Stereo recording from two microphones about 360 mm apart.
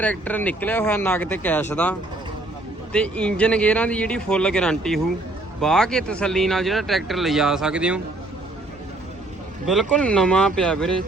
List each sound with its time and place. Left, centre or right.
0.0 s speech: centre
9.6 s speech: centre